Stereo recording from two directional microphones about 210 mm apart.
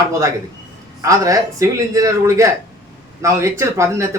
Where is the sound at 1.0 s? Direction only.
15° right (ahead or behind).